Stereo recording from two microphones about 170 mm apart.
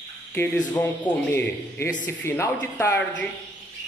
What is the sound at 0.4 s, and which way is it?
A man's voice, 10° left (ahead or behind).